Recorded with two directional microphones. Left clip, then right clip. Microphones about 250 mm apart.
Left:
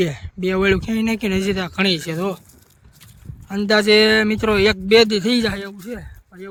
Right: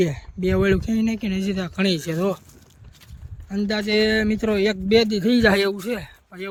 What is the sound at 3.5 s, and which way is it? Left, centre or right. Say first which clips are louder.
Speech: left 9 dB; centre.